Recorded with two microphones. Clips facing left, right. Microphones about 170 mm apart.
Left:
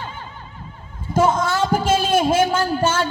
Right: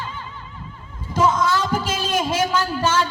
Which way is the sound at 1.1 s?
50° left (ahead or behind).